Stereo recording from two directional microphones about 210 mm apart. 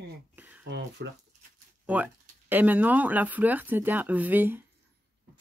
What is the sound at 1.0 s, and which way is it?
Speech, 50° right (ahead or behind).